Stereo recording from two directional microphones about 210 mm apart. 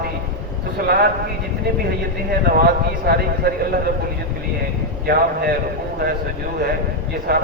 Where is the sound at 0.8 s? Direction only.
45° right (ahead or behind).